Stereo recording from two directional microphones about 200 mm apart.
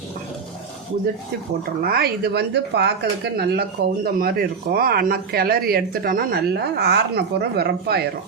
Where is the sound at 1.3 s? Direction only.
55° right (ahead or behind).